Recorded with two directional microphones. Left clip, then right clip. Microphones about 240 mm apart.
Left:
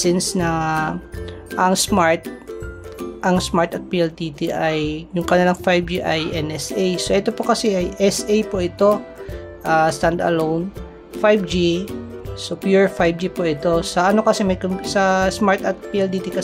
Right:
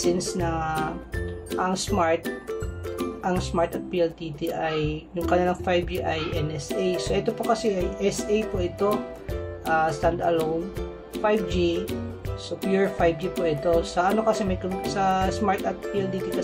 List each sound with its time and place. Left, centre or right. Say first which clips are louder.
0.4 s speech: left 7 dB; left
3.2 s speech: left 8 dB; left